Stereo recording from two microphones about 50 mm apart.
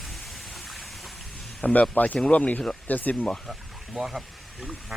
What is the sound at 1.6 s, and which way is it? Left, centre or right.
Speech, left.